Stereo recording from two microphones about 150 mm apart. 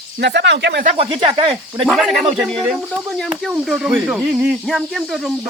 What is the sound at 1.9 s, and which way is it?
Speech, centre (ahead or behind).